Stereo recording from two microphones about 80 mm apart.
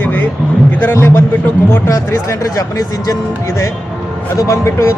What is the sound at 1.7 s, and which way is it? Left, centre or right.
Speech, left.